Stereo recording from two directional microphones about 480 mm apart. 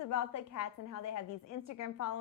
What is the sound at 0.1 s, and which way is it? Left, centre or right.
A woman's voice, left.